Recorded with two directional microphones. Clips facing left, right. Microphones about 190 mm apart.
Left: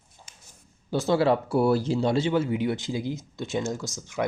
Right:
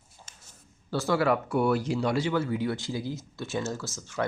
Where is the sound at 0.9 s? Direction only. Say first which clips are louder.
Left 3 dB; 20° left (ahead or behind).